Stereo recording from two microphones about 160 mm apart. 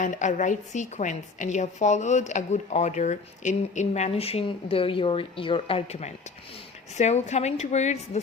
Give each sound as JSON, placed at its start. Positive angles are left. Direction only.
{"t": 0.0, "sound": "a woman's voice", "side_deg": 50}